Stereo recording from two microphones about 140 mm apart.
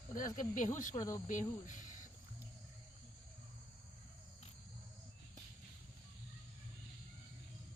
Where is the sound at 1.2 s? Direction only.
65° left (ahead or behind).